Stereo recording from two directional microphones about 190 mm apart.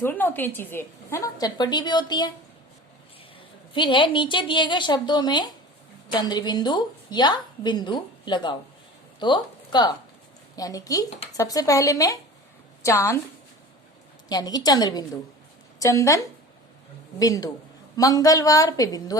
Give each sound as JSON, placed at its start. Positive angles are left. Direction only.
{"t": 0.0, "sound": "a woman's voice", "side_deg": 10}
{"t": 3.8, "sound": "a woman's voice", "side_deg": 25}
{"t": 14.3, "sound": "a woman's voice", "side_deg": 20}